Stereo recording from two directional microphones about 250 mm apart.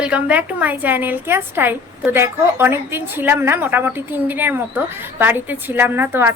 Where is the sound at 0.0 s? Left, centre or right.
Centre.